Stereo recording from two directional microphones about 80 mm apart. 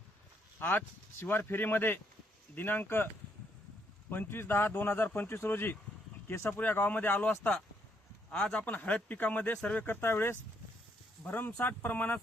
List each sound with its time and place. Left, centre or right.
0.6 s speech: left
4.1 s speech: left